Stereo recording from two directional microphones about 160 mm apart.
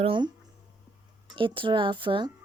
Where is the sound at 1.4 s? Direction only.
30° right (ahead or behind).